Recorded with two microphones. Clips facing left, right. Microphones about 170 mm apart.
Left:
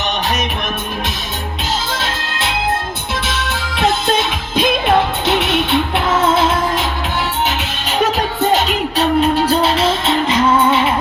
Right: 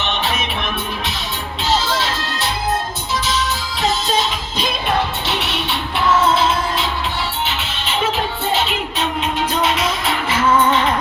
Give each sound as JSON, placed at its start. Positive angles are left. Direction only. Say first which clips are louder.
{"t": 1.9, "sound": "music", "louder": "right 1 dB", "side_deg": 50}
{"t": 10.2, "sound": "music", "louder": "left 1 dB", "side_deg": 15}